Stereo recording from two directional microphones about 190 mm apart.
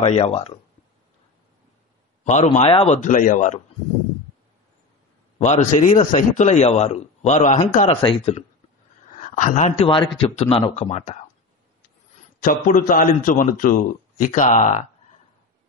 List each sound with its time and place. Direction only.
0.0 s a man's voice: 30° left (ahead or behind)
2.2 s a man's voice: 40° left (ahead or behind)
5.4 s a man's voice: 40° left (ahead or behind)
7.9 s a man's voice: 30° left (ahead or behind)
12.4 s a man's voice: 45° left (ahead or behind)